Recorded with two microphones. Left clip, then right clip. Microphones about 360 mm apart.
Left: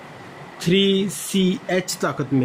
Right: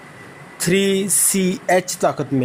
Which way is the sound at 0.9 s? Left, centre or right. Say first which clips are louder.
Right 2 dB; right.